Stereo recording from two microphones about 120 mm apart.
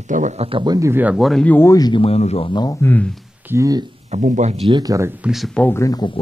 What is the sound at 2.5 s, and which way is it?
Speech, 35° left (ahead or behind).